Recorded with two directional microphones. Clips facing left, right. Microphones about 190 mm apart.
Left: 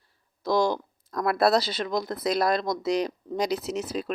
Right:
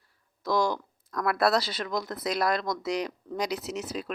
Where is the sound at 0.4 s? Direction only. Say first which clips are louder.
Left 3 dB; 25° left (ahead or behind).